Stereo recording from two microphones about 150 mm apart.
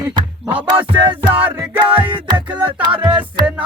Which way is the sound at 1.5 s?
10° right (ahead or behind).